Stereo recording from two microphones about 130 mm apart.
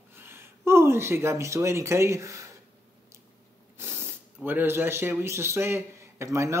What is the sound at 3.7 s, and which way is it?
Speech, 20° right (ahead or behind).